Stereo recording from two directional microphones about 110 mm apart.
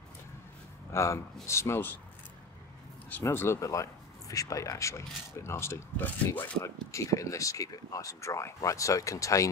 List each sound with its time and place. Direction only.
0.9 s speech: 25° left (ahead or behind)
3.1 s speech: 20° left (ahead or behind)
6.6 s speech: 30° left (ahead or behind)